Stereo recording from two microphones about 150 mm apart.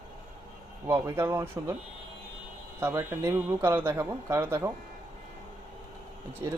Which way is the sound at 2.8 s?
15° right (ahead or behind).